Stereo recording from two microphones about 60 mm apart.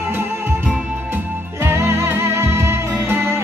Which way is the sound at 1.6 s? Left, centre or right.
Right.